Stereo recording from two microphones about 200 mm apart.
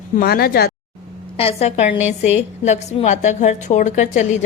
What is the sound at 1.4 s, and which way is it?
A woman's voice, 30° left (ahead or behind).